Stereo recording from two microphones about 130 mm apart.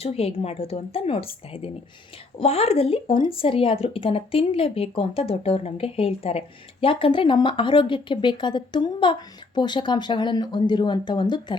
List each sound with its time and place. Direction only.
0.0 s speech: 50° left (ahead or behind)